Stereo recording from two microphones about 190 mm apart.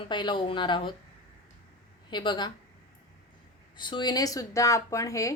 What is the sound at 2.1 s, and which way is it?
Speech, 25° left (ahead or behind).